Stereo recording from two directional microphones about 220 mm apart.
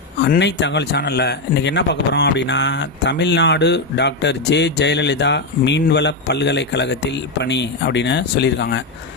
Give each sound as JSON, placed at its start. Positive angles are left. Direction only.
{"t": 0.2, "sound": "speech", "side_deg": 50}